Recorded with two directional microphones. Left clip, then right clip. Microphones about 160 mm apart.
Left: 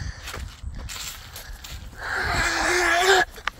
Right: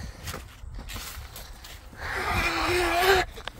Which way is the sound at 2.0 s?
5° left (ahead or behind).